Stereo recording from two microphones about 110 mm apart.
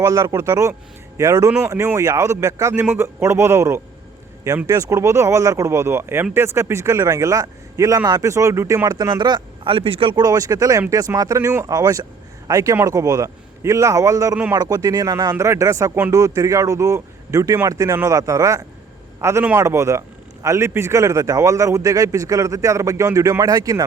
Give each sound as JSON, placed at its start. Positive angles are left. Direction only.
{"t": 0.0, "sound": "a man's voice", "side_deg": -30}
{"t": 10.2, "sound": "a man's voice", "side_deg": -35}